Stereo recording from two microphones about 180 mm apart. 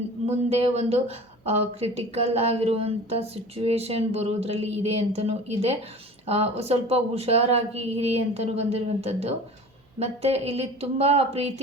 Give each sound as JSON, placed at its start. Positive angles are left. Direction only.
{"t": 0.3, "sound": "speech", "side_deg": -35}